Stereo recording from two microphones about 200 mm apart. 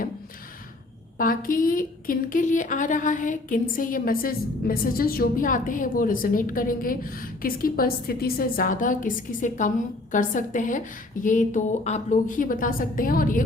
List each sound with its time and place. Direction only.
1.2 s a woman's voice: 45° left (ahead or behind)